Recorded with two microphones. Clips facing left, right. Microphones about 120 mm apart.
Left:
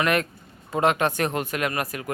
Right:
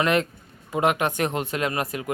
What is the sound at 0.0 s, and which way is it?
Speech, 25° right (ahead or behind).